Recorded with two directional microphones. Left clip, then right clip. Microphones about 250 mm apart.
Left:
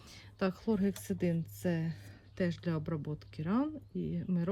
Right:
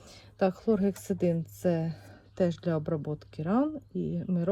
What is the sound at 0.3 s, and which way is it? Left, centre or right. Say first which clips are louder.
Speech: right 7 dB; centre.